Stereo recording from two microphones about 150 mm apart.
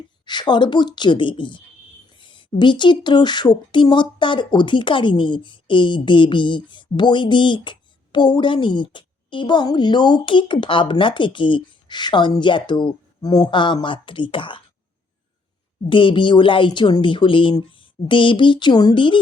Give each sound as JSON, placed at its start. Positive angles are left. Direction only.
{"t": 0.3, "sound": "speech", "side_deg": 30}
{"t": 2.1, "sound": "a sound", "side_deg": 35}
{"t": 2.6, "sound": "speech", "side_deg": 30}
{"t": 15.9, "sound": "speech", "side_deg": 35}